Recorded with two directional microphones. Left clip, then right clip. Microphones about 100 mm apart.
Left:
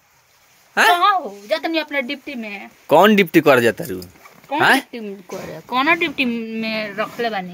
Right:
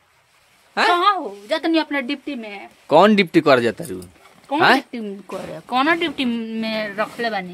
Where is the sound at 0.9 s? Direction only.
45° right (ahead or behind).